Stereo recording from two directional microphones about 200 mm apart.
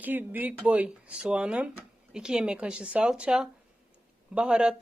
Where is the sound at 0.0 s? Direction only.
10° right (ahead or behind).